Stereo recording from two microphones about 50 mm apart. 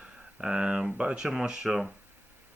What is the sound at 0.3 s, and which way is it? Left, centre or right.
Speech, centre.